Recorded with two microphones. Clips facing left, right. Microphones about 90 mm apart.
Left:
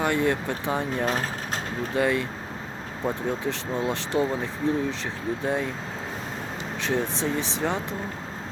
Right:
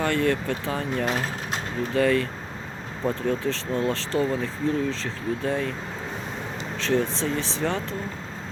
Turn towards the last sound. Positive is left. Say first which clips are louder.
# even
turn(degrees=15)  # may be behind; listen again after turning